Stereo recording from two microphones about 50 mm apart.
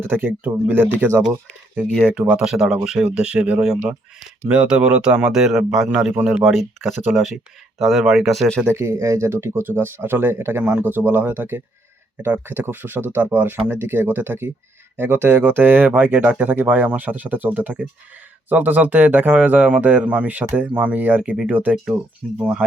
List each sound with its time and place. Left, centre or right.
0.0 s speech: right
2.4 s speech: centre
5.3 s speech: centre
6.4 s speech: centre
8.7 s speech: right
10.6 s speech: right
10.8 s speech: right
12.1 s speech: right
12.5 s speech: right
22.2 s speech: centre